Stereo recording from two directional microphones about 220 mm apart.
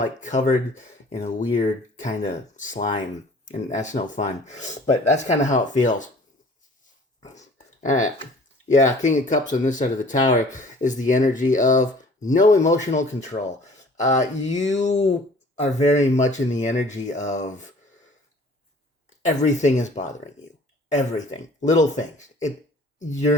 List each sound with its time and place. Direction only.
0.0 s speech: 35° left (ahead or behind)
7.3 s a sound: 35° left (ahead or behind)
8.6 s speech: 35° left (ahead or behind)
19.2 s speech: 35° left (ahead or behind)